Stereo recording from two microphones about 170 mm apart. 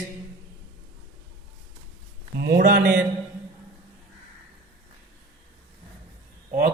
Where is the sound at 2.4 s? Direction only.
65° right (ahead or behind).